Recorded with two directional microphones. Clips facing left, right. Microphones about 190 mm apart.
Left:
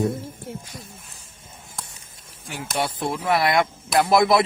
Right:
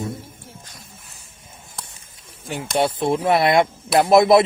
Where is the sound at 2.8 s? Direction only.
25° right (ahead or behind).